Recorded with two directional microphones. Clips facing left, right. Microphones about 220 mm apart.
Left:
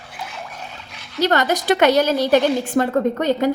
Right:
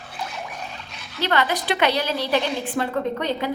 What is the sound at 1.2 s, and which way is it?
A woman's voice, 45° left (ahead or behind).